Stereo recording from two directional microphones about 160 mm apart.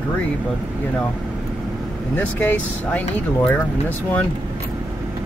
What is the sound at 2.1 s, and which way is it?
Speech, 10° left (ahead or behind).